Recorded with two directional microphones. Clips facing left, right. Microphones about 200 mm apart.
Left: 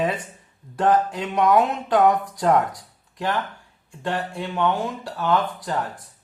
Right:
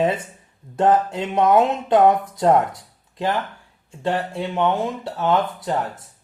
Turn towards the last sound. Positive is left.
turn(degrees=-20)  # may be behind; listen again after turning